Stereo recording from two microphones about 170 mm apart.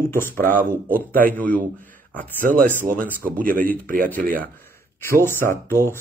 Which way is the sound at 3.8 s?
55° right (ahead or behind).